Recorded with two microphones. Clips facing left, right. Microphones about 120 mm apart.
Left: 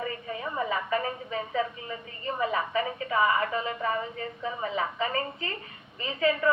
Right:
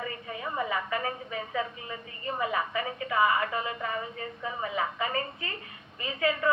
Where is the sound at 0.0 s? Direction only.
35° left (ahead or behind).